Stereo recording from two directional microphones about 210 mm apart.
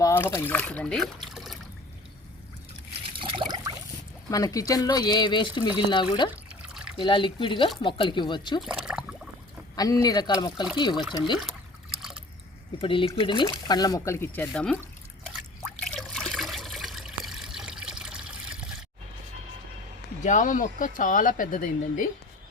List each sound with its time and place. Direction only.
0.0 s speech: 15° left (ahead or behind)
3.1 s trickle: 25° right (ahead or behind)
4.3 s speech: 15° left (ahead or behind)
6.3 s water: 5° right (ahead or behind)
6.9 s speech: 25° left (ahead or behind)
8.6 s a sound: 5° right (ahead or behind)
9.7 s speech: 20° left (ahead or behind)
12.8 s speech: 25° left (ahead or behind); by 14.8 s 5° left (ahead or behind)
15.8 s water: centre (ahead or behind)
20.2 s speech: 40° left (ahead or behind)